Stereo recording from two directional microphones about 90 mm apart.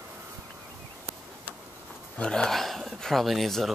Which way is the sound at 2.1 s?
5° left (ahead or behind).